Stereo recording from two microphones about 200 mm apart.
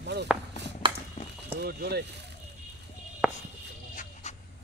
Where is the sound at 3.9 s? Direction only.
35° left (ahead or behind).